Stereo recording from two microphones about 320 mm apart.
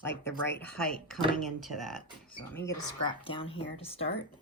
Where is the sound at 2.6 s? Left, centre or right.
Centre.